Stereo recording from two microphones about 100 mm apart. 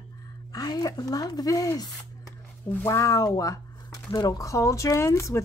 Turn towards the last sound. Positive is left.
turn(degrees=30)  # may be behind; listen again after turning